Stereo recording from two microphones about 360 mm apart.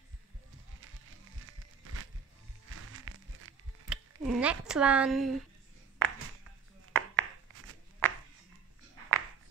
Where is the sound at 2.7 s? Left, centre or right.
Right.